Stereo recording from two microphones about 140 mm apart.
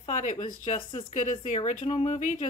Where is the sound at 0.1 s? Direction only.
60° left (ahead or behind).